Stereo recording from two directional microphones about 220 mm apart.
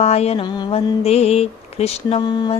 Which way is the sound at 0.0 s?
30° left (ahead or behind).